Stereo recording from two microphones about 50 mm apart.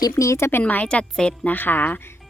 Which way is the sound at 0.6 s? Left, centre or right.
Left.